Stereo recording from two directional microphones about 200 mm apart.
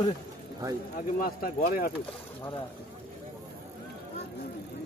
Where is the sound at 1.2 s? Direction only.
45° left (ahead or behind).